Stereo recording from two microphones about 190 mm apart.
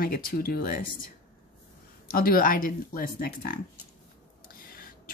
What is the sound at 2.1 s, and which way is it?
A woman's voice, 50° left (ahead or behind).